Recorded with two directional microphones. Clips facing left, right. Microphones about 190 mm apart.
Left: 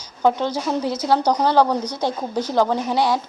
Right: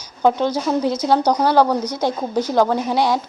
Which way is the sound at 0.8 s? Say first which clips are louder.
Right 1 dB; 15° right (ahead or behind).